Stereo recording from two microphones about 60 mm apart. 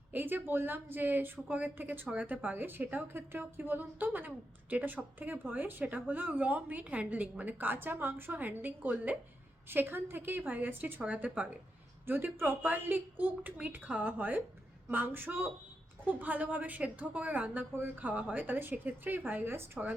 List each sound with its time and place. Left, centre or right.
0.1 s a woman's voice: right
12.0 s a woman's voice: right